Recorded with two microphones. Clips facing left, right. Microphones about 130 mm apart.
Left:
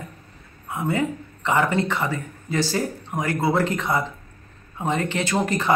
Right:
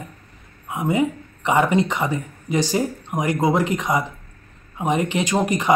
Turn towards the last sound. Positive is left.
turn(degrees=-15)  # may be behind; listen again after turning